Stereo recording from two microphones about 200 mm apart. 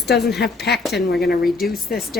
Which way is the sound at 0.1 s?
55° left (ahead or behind).